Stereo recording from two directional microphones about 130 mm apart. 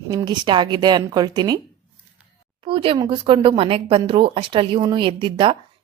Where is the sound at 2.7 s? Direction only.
45° right (ahead or behind).